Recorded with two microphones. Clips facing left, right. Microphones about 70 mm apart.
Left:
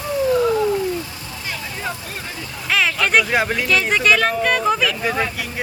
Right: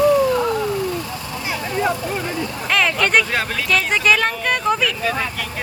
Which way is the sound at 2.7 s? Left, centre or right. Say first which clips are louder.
Even; centre.